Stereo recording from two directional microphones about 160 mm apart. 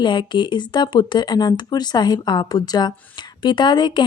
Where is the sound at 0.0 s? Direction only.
30° left (ahead or behind).